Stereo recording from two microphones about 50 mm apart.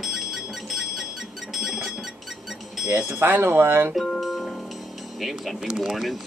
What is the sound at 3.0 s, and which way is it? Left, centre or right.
Speech, right.